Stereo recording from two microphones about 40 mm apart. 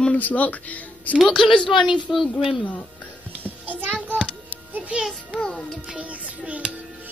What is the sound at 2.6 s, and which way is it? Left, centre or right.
Music, left.